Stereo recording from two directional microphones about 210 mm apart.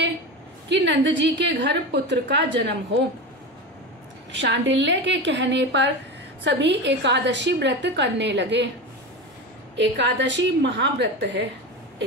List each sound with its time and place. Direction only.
0.7 s a woman's voice: 60° right (ahead or behind)
4.3 s a woman's voice: 60° right (ahead or behind)
9.8 s a woman's voice: 55° right (ahead or behind)